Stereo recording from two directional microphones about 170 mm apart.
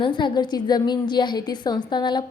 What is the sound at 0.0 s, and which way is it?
A woman's voice, 30° left (ahead or behind).